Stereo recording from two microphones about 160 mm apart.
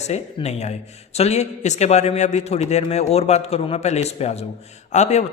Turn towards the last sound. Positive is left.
turn(degrees=45)  # may be behind; listen again after turning